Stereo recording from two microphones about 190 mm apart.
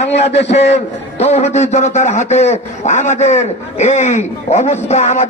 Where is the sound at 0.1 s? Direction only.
35° left (ahead or behind).